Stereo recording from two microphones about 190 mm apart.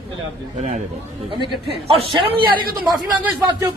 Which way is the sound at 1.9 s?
30° right (ahead or behind).